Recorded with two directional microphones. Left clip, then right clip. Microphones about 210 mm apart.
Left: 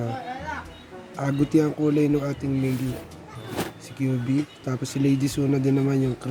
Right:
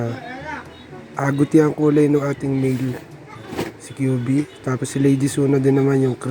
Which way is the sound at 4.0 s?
45° right (ahead or behind).